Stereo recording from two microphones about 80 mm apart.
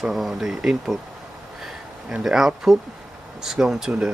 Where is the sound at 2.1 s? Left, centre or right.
Centre.